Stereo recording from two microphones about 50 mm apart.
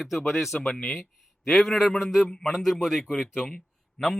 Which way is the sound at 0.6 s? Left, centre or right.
Left.